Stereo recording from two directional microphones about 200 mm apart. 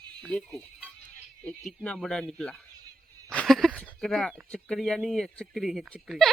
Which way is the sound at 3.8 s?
Centre (ahead or behind).